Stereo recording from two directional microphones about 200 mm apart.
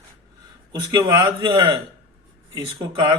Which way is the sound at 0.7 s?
20° right (ahead or behind).